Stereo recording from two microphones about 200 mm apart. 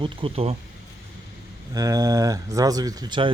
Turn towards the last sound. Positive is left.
turn(degrees=-20)  # may be behind; listen again after turning